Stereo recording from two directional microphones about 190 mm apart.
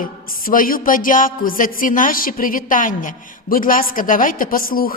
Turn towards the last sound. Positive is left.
turn(degrees=50)  # may be behind; listen again after turning